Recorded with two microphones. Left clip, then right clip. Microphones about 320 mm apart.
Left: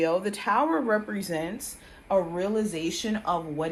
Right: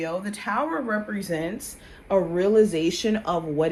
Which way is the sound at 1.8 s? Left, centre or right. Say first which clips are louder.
Right 2 dB; centre.